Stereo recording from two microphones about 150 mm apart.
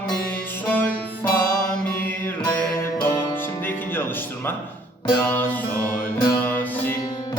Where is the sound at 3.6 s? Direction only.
15° left (ahead or behind).